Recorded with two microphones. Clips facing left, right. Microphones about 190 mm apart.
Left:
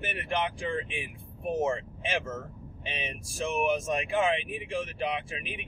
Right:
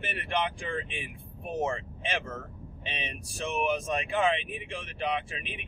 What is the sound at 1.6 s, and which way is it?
Speech, 5° left (ahead or behind).